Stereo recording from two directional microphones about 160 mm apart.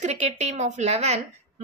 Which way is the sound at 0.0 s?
45° right (ahead or behind).